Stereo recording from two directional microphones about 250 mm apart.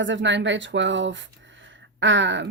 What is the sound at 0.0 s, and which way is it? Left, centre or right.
Speech, right.